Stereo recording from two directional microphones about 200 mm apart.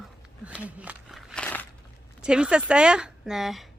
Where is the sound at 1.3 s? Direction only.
10° left (ahead or behind).